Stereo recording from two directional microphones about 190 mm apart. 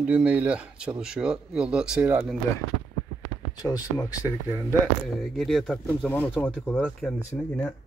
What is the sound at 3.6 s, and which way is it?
Speech, 20° left (ahead or behind).